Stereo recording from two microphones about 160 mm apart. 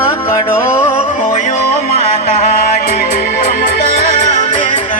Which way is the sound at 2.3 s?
55° left (ahead or behind).